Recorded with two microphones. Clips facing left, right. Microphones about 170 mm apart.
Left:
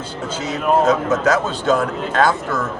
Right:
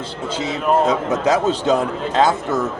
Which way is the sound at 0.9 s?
15° right (ahead or behind).